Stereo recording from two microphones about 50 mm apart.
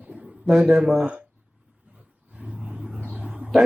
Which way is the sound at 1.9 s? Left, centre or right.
Right.